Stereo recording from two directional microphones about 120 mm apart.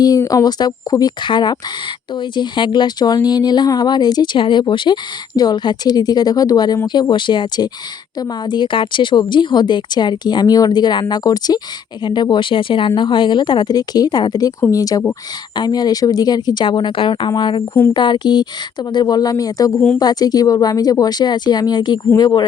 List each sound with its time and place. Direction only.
0.0 s speech: 30° left (ahead or behind)